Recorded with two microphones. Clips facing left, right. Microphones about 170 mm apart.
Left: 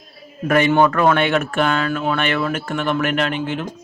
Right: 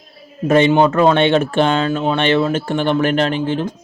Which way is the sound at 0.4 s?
25° right (ahead or behind).